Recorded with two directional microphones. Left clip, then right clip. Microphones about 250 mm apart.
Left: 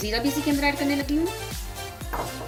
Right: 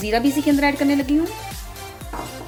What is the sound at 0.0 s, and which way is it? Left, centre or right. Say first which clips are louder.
Speech: right 6 dB; right.